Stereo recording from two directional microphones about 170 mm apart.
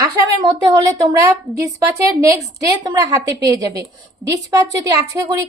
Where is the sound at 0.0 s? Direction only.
25° right (ahead or behind).